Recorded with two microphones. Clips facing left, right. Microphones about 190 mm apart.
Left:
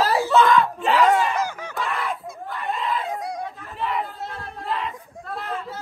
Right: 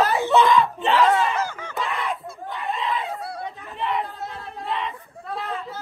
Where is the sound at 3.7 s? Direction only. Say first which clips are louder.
Right 1 dB; centre (ahead or behind).